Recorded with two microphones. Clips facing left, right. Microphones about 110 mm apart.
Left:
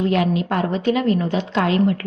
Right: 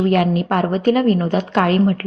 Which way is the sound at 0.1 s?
50° right (ahead or behind).